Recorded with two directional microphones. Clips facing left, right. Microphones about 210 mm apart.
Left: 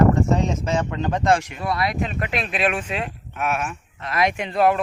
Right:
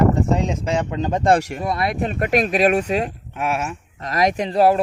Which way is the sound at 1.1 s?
30° right (ahead or behind).